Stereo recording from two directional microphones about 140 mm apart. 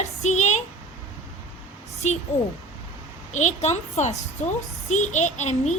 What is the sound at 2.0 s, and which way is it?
Speech, 55° left (ahead or behind).